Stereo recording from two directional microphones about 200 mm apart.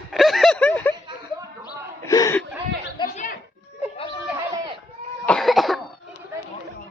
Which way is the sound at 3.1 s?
40° left (ahead or behind).